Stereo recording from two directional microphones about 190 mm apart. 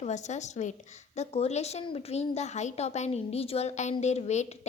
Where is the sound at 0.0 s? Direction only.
40° left (ahead or behind).